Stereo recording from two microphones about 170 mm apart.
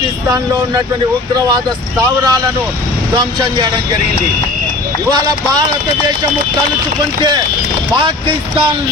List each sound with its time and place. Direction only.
1.5 s speech: 25° right (ahead or behind)
5.1 s speech: 25° right (ahead or behind)